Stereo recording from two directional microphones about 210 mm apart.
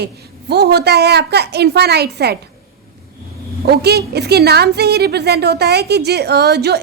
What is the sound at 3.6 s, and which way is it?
A woman's voice, 50° right (ahead or behind).